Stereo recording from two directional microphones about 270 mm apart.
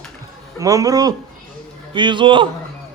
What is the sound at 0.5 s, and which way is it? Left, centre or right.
A man's voice, centre.